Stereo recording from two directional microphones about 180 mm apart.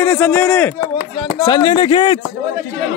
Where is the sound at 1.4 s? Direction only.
25° left (ahead or behind).